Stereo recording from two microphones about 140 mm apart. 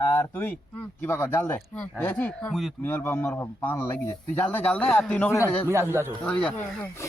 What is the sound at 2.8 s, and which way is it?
Speech, 15° left (ahead or behind).